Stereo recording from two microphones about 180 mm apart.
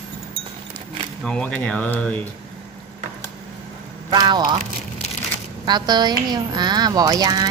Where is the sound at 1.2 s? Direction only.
5° left (ahead or behind).